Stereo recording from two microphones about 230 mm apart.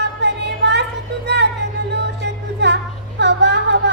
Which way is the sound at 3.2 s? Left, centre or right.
Right.